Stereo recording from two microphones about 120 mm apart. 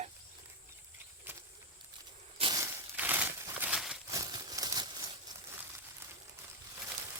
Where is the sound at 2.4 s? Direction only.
55° right (ahead or behind).